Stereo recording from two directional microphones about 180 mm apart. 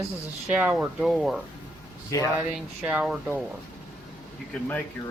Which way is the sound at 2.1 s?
20° left (ahead or behind).